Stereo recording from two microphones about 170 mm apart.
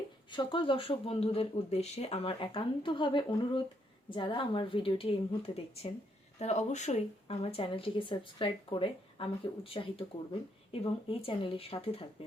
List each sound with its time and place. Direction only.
0.3 s speech: 30° left (ahead or behind)